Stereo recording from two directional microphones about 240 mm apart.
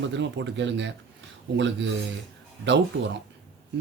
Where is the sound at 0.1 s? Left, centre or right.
Right.